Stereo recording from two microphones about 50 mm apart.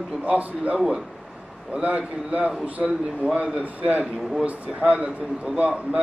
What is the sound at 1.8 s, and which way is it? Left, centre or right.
A man's voice, right.